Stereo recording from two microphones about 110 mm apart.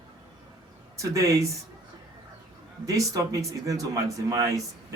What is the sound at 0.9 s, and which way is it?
Speech, 30° right (ahead or behind).